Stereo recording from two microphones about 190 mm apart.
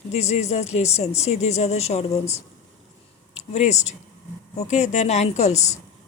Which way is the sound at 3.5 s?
35° left (ahead or behind).